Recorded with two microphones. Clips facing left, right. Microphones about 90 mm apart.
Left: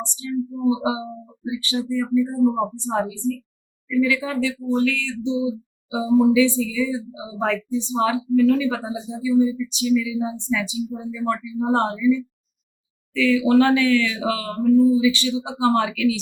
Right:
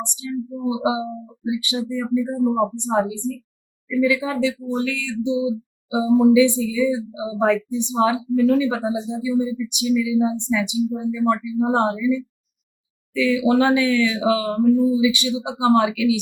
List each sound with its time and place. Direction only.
0.6 s speech: 15° right (ahead or behind)